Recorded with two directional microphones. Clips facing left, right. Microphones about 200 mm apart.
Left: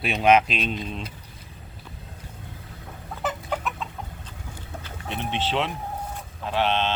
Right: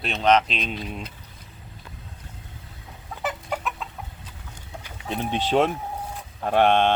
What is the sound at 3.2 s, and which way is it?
Chicken, centre (ahead or behind).